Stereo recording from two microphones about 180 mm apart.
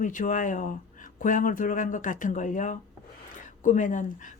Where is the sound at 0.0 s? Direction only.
45° left (ahead or behind).